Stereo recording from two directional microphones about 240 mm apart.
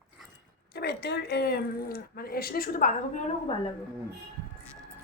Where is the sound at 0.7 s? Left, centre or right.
Left.